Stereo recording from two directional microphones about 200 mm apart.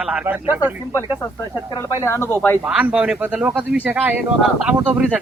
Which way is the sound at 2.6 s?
5° right (ahead or behind).